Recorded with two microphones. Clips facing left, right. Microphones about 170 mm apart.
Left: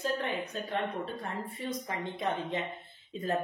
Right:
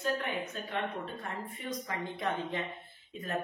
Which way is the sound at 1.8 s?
20° left (ahead or behind).